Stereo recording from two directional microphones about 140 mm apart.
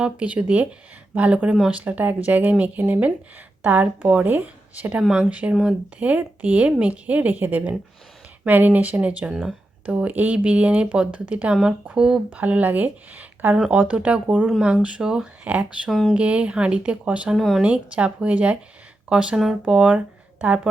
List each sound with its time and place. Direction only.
0.0 s speech: 10° right (ahead or behind)